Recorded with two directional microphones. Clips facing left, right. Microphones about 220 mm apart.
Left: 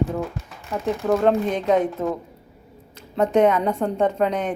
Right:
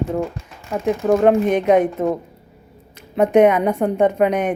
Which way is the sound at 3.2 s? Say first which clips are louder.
Right 4 dB; 15° right (ahead or behind).